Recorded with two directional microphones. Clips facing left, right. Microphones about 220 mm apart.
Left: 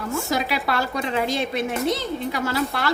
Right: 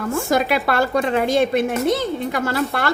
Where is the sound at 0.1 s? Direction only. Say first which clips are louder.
Right 6 dB; 50° right (ahead or behind).